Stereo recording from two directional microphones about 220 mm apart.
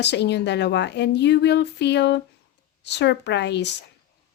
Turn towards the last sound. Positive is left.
turn(degrees=50)  # may be behind; listen again after turning